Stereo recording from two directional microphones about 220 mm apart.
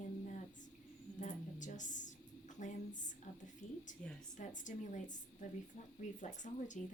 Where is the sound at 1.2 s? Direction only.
35° left (ahead or behind).